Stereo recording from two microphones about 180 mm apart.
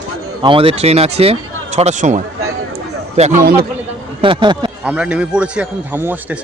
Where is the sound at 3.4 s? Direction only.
55° right (ahead or behind).